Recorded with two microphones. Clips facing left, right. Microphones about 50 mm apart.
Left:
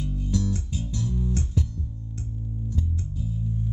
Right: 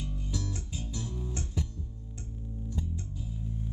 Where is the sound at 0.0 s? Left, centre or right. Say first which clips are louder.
Left 9 dB; centre.